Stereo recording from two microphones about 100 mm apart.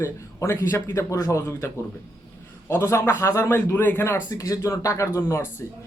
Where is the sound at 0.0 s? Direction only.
30° left (ahead or behind).